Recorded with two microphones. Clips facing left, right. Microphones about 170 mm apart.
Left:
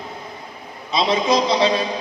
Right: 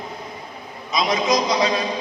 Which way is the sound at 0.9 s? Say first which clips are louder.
Left 2 dB; 30° left (ahead or behind).